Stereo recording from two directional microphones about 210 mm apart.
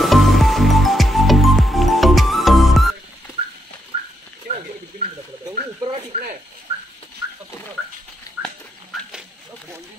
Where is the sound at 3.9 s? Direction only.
25° right (ahead or behind).